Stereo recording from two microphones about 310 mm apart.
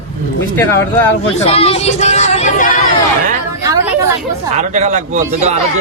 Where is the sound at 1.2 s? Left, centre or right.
Centre.